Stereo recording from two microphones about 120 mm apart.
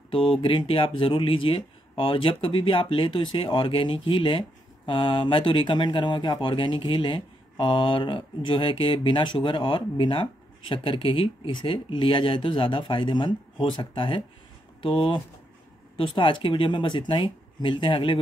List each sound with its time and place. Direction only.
0.4 s speech: 50° left (ahead or behind)
16.0 s speech: 45° left (ahead or behind)